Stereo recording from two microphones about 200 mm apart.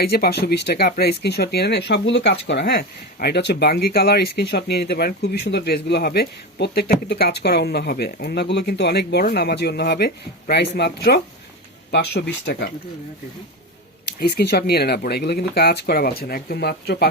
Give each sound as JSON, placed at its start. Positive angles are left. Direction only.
{"t": 0.0, "sound": "speech", "side_deg": 50}
{"t": 14.2, "sound": "speech", "side_deg": 55}